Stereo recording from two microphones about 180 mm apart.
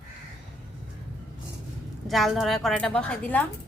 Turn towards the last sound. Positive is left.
turn(degrees=10)  # may be behind; listen again after turning